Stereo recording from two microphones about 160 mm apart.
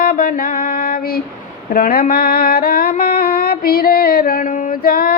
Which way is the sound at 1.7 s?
65° left (ahead or behind).